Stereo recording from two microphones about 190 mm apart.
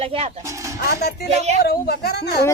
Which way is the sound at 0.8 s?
55° left (ahead or behind).